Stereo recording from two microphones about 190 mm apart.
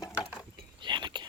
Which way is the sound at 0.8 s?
25° right (ahead or behind).